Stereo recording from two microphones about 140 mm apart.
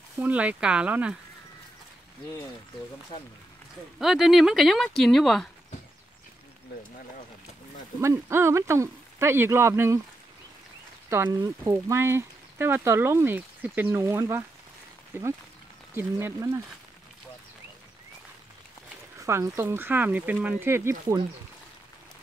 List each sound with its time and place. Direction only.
0.2 s speech: 10° right (ahead or behind)
3.1 s speech: 40° left (ahead or behind)
4.0 s speech: centre (ahead or behind)
8.0 s speech: 20° right (ahead or behind)
11.1 s speech: 20° right (ahead or behind)
15.9 s speech: 15° right (ahead or behind)
19.1 s speech: 20° right (ahead or behind)